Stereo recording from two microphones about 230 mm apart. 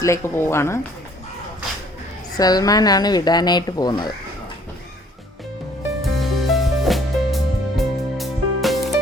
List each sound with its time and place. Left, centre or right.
0.0 s speech: centre
2.3 s speech: centre
6.0 s music: centre